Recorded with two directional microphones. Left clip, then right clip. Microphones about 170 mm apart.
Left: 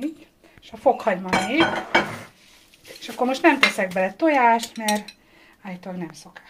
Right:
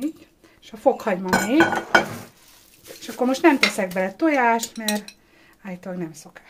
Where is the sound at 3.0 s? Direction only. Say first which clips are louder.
Right 1 dB; 25° right (ahead or behind).